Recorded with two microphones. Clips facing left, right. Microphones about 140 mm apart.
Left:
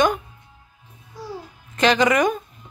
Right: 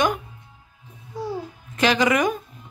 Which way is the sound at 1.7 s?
5° right (ahead or behind).